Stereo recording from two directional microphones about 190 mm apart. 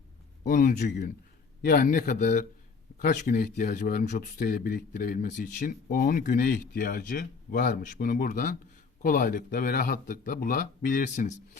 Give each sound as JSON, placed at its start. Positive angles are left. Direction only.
{"t": 0.4, "sound": "speech", "side_deg": 45}